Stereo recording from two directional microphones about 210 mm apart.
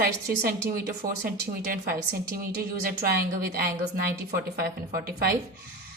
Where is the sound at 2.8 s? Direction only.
45° right (ahead or behind).